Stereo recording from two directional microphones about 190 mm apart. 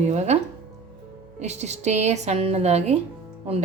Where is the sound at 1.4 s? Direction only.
35° right (ahead or behind).